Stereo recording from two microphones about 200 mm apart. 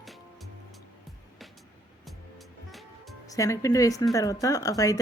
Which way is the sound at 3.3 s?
15° left (ahead or behind).